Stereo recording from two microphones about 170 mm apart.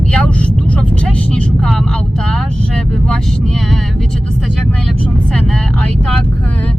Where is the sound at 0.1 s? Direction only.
5° left (ahead or behind).